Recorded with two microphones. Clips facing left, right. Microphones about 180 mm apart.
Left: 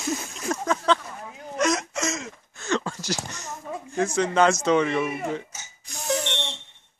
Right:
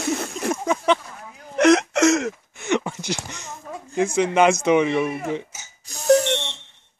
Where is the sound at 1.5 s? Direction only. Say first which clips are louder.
Right 9 dB; 65° right (ahead or behind).